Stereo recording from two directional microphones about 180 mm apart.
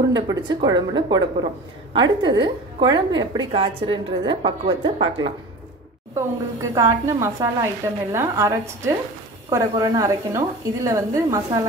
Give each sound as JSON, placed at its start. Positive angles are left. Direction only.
{"t": 0.1, "sound": "a woman's voice", "side_deg": -25}
{"t": 6.1, "sound": "a woman's voice", "side_deg": -20}